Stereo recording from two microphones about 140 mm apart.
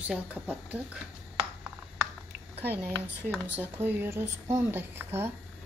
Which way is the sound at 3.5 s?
15° right (ahead or behind).